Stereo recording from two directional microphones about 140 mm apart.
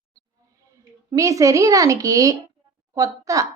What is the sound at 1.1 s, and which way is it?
Speech, 25° right (ahead or behind).